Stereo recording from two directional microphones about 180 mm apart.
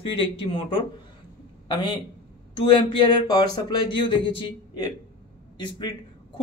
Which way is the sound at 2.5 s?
30° left (ahead or behind).